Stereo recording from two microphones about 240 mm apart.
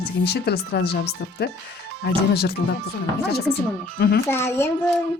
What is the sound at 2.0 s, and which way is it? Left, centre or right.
Speech, left.